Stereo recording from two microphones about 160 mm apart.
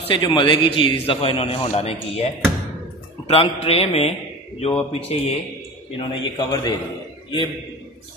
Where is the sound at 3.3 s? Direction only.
35° left (ahead or behind).